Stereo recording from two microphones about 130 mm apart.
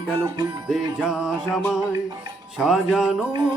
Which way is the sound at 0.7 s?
5° right (ahead or behind).